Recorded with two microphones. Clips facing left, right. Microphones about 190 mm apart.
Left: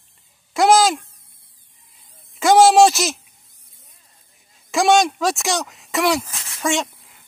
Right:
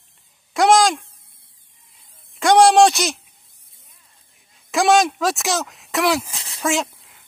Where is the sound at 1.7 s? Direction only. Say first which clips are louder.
Left 1 dB; centre (ahead or behind).